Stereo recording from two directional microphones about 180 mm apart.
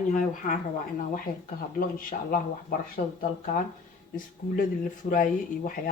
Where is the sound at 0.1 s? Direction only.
45° left (ahead or behind).